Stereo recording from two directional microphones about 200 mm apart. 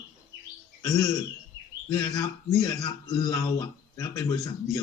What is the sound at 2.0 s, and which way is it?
Speech, 20° left (ahead or behind).